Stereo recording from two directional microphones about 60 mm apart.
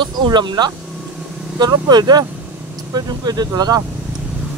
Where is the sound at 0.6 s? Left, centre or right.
Right.